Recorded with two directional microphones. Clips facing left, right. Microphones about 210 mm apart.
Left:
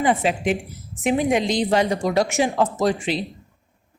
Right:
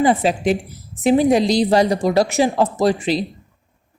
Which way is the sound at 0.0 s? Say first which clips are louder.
Right 4 dB; 35° right (ahead or behind).